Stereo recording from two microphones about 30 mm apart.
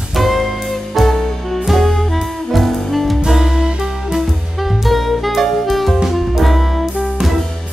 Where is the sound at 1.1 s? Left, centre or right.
Centre.